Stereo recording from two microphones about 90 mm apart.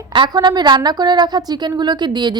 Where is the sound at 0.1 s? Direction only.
60° right (ahead or behind).